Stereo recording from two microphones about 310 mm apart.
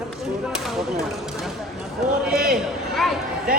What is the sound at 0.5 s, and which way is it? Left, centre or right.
Speech, centre.